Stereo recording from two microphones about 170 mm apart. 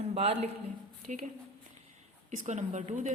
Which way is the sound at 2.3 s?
45° right (ahead or behind).